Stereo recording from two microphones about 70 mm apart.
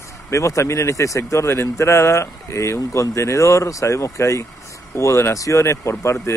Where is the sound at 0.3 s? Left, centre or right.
Left.